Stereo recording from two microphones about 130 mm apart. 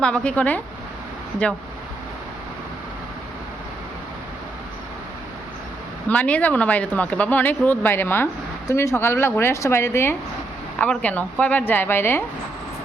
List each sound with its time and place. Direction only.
0.0 s speech: 10° left (ahead or behind)
6.1 s speech: 10° left (ahead or behind)